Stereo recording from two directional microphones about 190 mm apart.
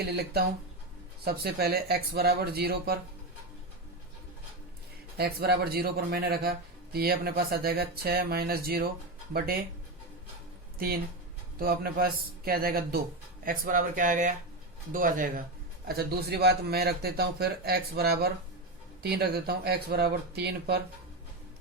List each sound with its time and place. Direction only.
0.0 s a man's voice: 55° right (ahead or behind)
5.1 s speech: 55° right (ahead or behind)
10.8 s a man's voice: 50° right (ahead or behind)